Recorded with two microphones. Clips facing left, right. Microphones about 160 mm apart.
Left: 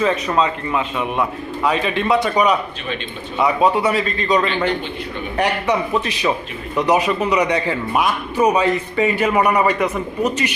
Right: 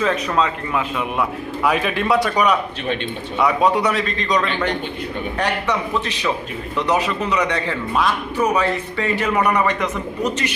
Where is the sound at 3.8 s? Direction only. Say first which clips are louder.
Left 2 dB; 5° left (ahead or behind).